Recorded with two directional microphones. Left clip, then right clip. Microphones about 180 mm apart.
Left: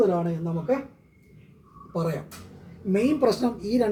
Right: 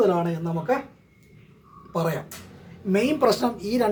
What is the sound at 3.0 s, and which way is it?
Speech, 15° left (ahead or behind).